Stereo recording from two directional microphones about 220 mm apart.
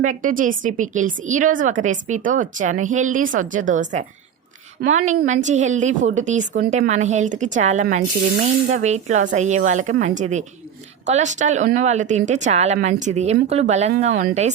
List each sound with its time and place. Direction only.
0.0 s a woman's voice: 35° right (ahead or behind)